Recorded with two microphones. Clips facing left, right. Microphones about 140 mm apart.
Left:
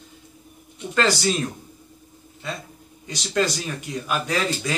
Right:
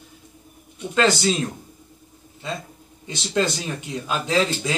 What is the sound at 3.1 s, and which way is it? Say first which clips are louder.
Speech: right 1 dB; 25° right (ahead or behind).